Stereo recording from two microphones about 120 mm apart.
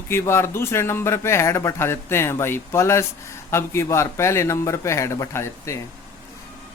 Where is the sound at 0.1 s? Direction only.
20° left (ahead or behind).